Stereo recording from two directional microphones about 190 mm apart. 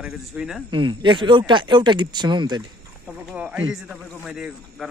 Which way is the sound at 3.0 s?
5° right (ahead or behind).